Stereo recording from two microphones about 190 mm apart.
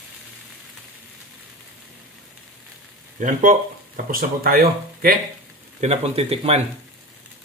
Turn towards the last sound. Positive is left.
turn(degrees=-30)  # may be behind; listen again after turning